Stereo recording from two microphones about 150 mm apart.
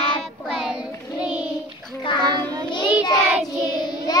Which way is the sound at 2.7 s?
30° left (ahead or behind).